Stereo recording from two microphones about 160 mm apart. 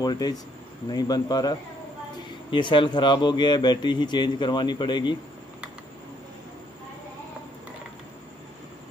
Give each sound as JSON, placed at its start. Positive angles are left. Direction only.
{"t": 0.0, "sound": "a man's voice", "side_deg": 25}